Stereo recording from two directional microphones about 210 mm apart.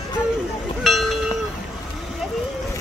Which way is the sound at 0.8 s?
Centre (ahead or behind).